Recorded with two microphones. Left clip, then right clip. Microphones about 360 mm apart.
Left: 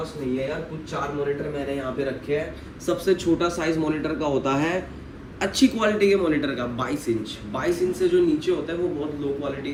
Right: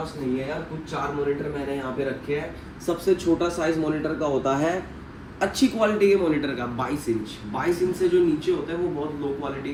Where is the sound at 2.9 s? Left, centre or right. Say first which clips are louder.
Even; centre.